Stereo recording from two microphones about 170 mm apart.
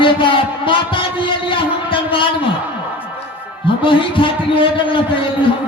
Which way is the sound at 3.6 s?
30° left (ahead or behind).